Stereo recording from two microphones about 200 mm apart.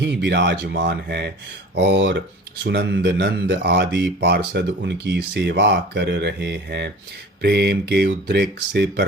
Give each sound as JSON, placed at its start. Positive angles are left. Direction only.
{"t": 0.0, "sound": "speech", "side_deg": -60}